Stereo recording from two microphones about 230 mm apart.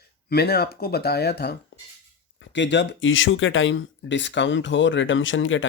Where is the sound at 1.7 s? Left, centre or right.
Left.